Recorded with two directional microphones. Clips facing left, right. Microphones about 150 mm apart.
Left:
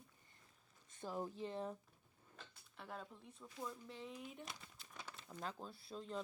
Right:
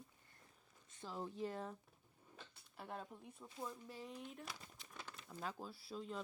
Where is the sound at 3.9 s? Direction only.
Centre (ahead or behind).